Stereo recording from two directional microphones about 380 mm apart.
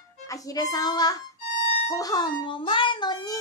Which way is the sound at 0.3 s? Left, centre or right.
Centre.